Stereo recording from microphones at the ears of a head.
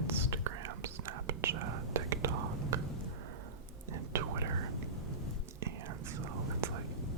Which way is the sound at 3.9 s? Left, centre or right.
Right.